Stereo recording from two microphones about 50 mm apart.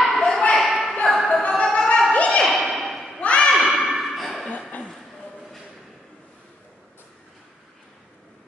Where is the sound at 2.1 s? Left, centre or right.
Left.